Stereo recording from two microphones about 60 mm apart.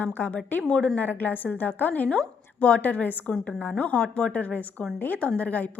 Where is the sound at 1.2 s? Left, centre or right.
Left.